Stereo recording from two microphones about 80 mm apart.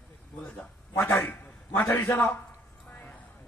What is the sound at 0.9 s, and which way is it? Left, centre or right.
A man's voice, left.